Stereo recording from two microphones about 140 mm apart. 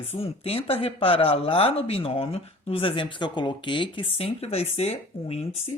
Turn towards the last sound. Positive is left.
turn(degrees=45)  # may be behind; listen again after turning